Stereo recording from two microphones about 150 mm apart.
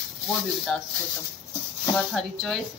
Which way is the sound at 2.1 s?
Centre (ahead or behind).